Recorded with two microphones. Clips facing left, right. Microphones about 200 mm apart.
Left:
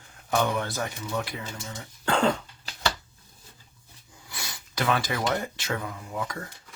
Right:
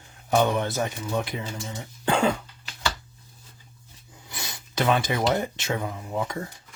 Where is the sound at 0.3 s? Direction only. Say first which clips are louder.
Right 4 dB; 20° right (ahead or behind).